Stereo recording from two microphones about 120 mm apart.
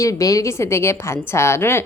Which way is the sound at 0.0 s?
30° left (ahead or behind).